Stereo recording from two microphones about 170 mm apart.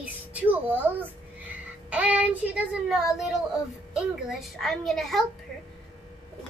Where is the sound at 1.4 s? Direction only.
10° right (ahead or behind).